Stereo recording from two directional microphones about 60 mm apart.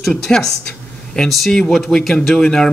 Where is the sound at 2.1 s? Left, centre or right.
Centre.